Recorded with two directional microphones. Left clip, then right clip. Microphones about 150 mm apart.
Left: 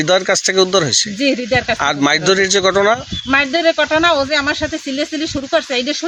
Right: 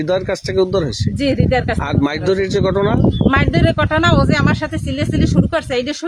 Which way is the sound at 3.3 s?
35° right (ahead or behind).